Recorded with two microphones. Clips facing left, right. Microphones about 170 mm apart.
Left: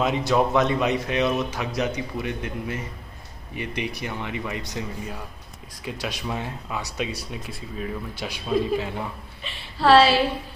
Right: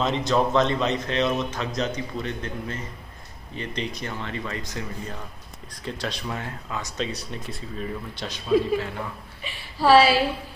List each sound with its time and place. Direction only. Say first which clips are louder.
0.0 s speech: left 1 dB; 10° left (ahead or behind)
7.2 s speech: even; 5° left (ahead or behind)
9.4 s a woman's voice: left 1 dB; 10° right (ahead or behind)